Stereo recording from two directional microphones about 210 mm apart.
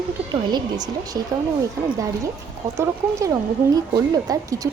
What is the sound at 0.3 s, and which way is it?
A woman's voice, 20° right (ahead or behind).